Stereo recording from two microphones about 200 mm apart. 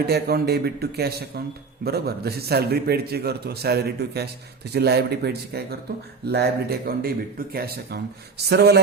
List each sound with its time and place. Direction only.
0.0 s a man's voice: 50° right (ahead or behind)